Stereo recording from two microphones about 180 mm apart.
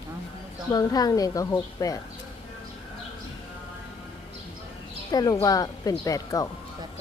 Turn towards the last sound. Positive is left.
turn(degrees=20)  # may be behind; listen again after turning